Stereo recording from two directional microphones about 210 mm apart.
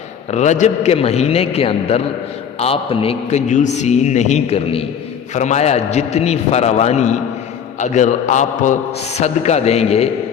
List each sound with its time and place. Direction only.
0.3 s a man's voice: 35° left (ahead or behind)